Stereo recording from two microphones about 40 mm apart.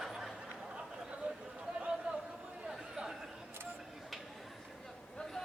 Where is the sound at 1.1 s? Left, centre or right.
Right.